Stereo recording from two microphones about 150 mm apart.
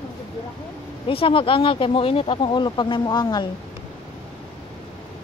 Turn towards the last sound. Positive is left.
turn(degrees=30)  # may be behind; listen again after turning